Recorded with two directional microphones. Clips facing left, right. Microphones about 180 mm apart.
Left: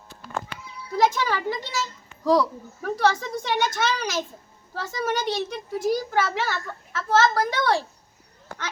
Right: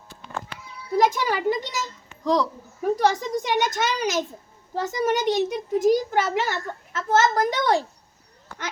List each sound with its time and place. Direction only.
0.9 s speech: 15° right (ahead or behind)
2.2 s speech: 5° left (ahead or behind)
3.0 s a woman's voice: 15° right (ahead or behind)